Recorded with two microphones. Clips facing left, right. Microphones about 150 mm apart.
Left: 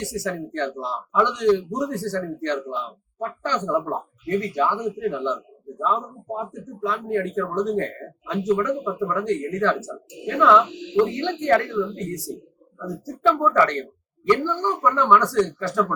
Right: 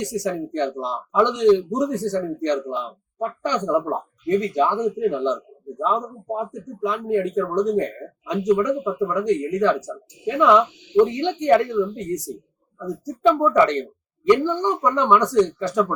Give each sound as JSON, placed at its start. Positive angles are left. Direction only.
{"t": 0.0, "sound": "speech", "side_deg": -15}